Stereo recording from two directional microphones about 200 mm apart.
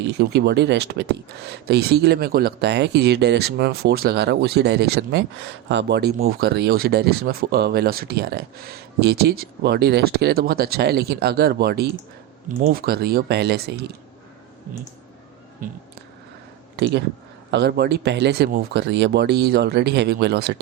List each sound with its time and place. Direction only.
0.0 s speech: 60° right (ahead or behind)
15.6 s speech: 45° right (ahead or behind)
16.7 s speech: 55° right (ahead or behind)